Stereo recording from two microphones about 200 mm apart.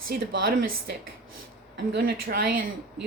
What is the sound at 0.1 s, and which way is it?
Speech, 50° right (ahead or behind).